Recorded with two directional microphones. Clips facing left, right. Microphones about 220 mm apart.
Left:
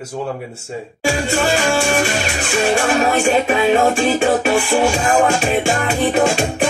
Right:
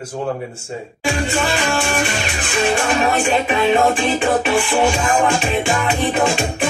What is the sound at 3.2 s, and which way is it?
Music, 45° left (ahead or behind).